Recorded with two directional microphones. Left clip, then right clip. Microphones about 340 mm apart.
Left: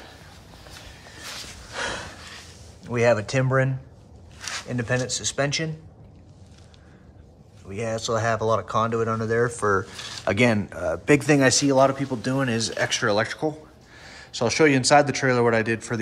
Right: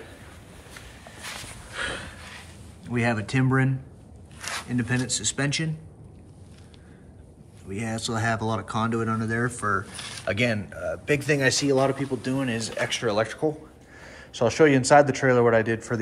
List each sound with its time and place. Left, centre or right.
2.9 s speech: centre
4.4 s a sound: centre
4.6 s speech: centre
7.7 s speech: centre
12.3 s speech: left
12.5 s speech: centre